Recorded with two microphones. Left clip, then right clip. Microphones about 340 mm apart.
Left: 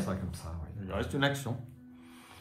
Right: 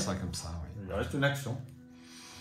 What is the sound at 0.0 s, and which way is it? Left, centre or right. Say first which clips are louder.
Speech: right 2 dB; centre.